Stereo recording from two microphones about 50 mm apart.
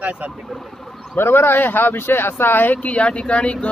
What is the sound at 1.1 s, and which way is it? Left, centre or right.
Speech, left.